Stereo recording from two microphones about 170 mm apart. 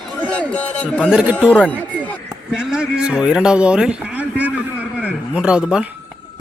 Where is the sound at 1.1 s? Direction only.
5° right (ahead or behind).